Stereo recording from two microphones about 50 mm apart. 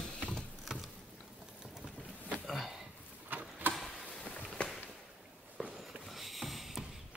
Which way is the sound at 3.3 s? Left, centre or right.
Right.